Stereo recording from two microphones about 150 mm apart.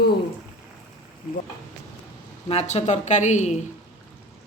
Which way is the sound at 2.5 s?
45° left (ahead or behind).